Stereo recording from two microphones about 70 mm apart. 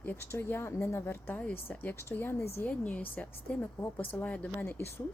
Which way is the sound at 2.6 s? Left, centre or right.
Centre.